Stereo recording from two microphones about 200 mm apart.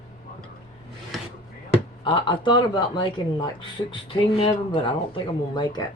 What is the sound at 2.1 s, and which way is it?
Speech, 25° left (ahead or behind).